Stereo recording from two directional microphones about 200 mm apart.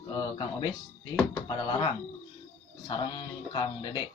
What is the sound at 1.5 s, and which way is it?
Speech, 20° left (ahead or behind).